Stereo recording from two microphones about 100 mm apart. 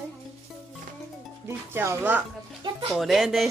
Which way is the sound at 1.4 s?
25° right (ahead or behind).